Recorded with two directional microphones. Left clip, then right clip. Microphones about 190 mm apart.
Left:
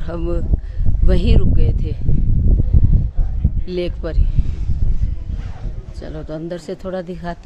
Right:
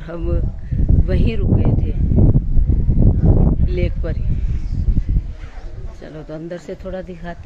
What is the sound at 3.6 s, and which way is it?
Speech, 25° left (ahead or behind).